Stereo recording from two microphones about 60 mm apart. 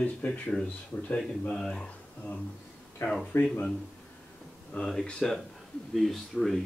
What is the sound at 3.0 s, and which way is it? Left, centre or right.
Speech, left.